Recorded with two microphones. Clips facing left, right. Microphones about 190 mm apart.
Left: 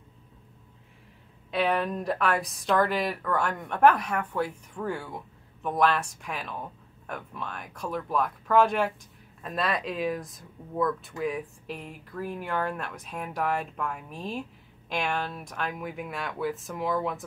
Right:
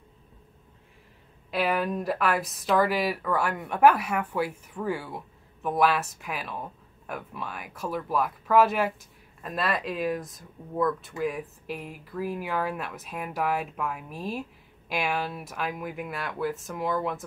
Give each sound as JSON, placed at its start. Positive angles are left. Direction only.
{"t": 1.5, "sound": "speech", "side_deg": -5}